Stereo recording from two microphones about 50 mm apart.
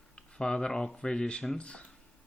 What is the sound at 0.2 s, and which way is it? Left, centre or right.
Speech, centre.